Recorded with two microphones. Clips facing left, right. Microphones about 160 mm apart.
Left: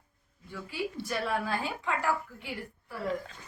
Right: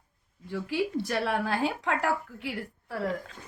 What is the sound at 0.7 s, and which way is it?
A woman's voice, 85° right.